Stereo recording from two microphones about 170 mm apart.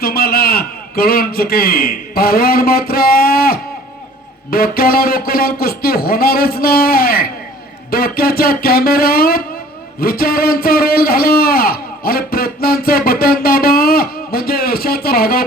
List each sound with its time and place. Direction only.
0.0 s a man's voice: 65° left (ahead or behind)